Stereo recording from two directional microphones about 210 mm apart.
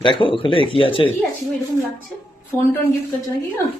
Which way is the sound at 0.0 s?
25° left (ahead or behind).